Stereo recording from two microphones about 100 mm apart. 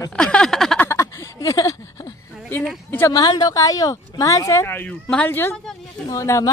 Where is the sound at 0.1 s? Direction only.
10° left (ahead or behind).